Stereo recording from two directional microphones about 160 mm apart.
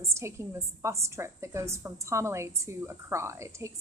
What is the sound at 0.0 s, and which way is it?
A woman's voice, 15° right (ahead or behind).